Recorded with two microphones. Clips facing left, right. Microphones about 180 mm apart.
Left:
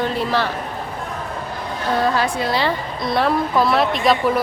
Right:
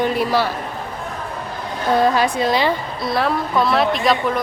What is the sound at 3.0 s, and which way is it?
A woman's voice, centre (ahead or behind).